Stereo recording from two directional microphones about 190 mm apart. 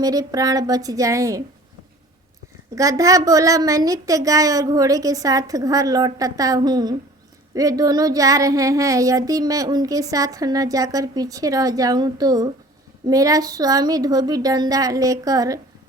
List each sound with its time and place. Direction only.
0.0 s a woman's voice: 20° right (ahead or behind)
2.7 s child singing: 15° right (ahead or behind)
13.1 s a woman's voice: 20° right (ahead or behind)